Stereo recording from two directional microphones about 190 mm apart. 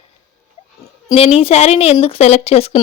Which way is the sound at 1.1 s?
30° left (ahead or behind).